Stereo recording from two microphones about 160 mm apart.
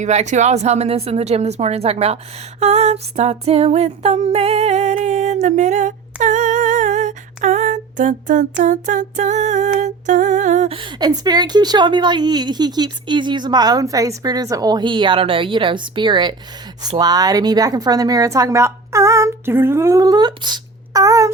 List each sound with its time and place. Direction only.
0.0 s speech: 45° right (ahead or behind)
2.6 s a sound: 40° right (ahead or behind)
8.6 s speech: 50° right (ahead or behind)
10.8 s a woman's voice: 30° right (ahead or behind)